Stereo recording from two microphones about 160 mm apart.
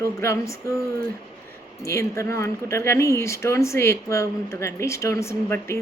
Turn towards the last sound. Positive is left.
turn(degrees=15)  # may be behind; listen again after turning